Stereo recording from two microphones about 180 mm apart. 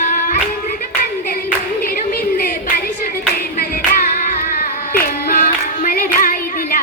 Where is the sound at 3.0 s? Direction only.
55° left (ahead or behind).